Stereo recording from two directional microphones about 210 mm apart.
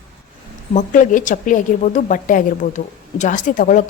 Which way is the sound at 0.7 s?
35° left (ahead or behind).